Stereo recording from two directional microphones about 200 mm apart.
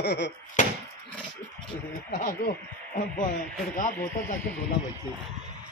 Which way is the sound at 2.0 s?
40° left (ahead or behind).